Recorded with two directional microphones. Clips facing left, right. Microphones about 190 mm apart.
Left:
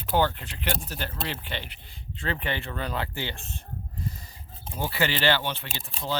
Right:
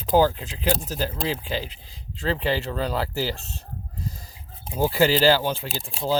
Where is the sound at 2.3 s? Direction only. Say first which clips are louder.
Right 6 dB; 30° right (ahead or behind).